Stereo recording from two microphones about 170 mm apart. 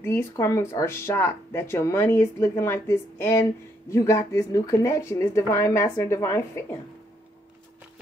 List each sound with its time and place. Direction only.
0.0 s speech: 15° left (ahead or behind)